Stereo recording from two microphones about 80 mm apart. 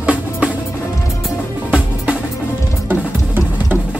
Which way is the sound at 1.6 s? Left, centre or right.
Centre.